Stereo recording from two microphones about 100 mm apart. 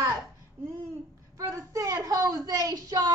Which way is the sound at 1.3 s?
30° right (ahead or behind).